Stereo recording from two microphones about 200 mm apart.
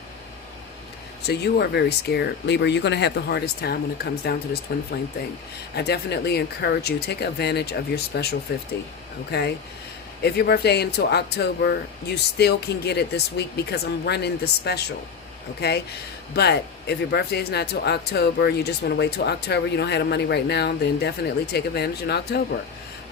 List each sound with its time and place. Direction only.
1.2 s speech: 55° left (ahead or behind)